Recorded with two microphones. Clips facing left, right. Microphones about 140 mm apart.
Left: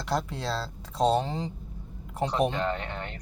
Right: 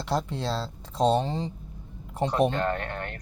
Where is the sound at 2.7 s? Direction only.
50° right (ahead or behind).